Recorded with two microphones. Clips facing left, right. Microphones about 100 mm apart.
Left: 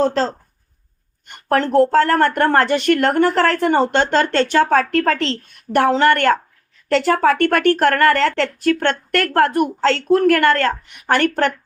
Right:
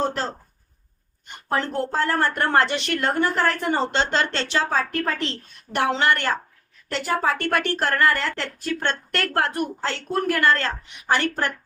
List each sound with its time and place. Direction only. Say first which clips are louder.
0.0 s speech: left 8 dB; 90° left
1.5 s a woman's voice: left 10 dB; 80° left
5.7 s a woman's voice: left 7 dB; 45° left (ahead or behind)
6.8 s a woman's voice: left 8 dB; 90° left; by 9.6 s 50° left (ahead or behind)
9.8 s a woman's voice: left 11 dB; 90° left; by 11.4 s 55° left (ahead or behind)